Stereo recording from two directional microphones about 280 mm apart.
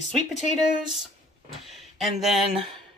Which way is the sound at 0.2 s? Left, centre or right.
Left.